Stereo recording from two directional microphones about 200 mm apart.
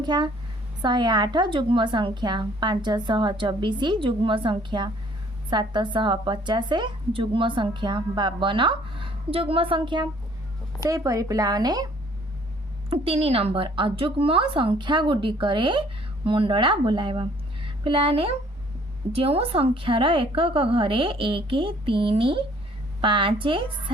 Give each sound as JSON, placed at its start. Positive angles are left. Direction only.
{"t": 0.0, "sound": "a woman's voice", "side_deg": -20}
{"t": 12.9, "sound": "a woman's voice", "side_deg": -30}